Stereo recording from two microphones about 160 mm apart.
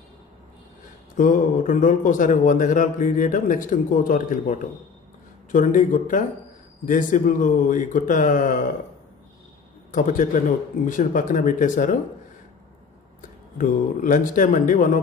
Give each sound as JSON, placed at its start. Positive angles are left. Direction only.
{"t": 1.1, "sound": "speech", "side_deg": 55}
{"t": 9.8, "sound": "a man's voice", "side_deg": 55}
{"t": 13.6, "sound": "speech", "side_deg": 55}